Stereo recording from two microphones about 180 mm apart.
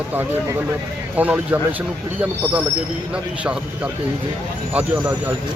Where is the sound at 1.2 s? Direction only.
10° right (ahead or behind).